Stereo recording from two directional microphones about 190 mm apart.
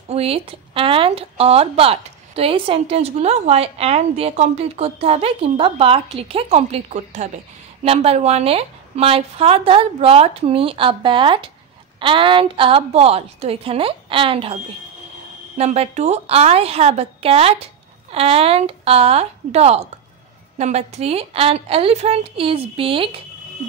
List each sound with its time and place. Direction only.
0.1 s a woman's voice: 30° right (ahead or behind)